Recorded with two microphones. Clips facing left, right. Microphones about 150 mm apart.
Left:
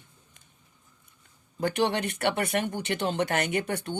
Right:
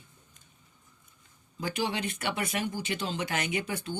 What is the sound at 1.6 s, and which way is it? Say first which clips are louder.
Speech: left 5 dB; 60° left (ahead or behind).